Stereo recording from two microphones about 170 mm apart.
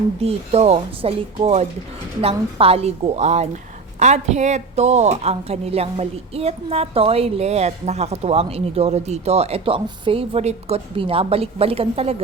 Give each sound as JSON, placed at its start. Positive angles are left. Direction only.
{"t": 0.2, "sound": "a woman's voice", "side_deg": -40}